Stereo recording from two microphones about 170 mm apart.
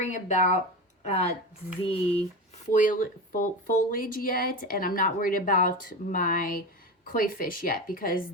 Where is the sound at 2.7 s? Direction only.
50° left (ahead or behind).